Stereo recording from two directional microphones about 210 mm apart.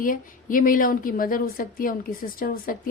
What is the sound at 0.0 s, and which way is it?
A woman's voice, 40° left (ahead or behind).